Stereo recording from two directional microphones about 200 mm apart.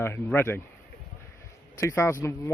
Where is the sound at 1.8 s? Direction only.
15° left (ahead or behind).